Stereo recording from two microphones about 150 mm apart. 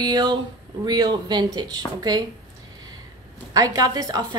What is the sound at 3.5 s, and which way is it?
Speech, 25° right (ahead or behind).